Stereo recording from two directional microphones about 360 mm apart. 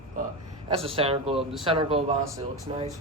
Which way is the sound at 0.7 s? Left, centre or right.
Centre.